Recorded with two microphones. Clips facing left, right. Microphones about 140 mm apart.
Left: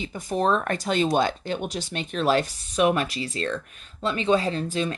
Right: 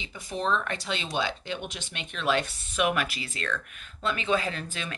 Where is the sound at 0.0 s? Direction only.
45° left (ahead or behind).